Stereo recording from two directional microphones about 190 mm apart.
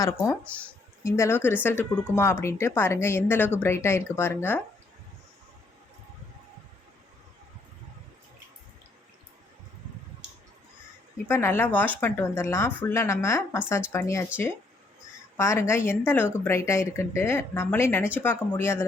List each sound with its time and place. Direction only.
0.0 s a woman's voice: 15° left (ahead or behind)
11.3 s a woman's voice: 15° left (ahead or behind)
15.4 s a woman's voice: 15° left (ahead or behind)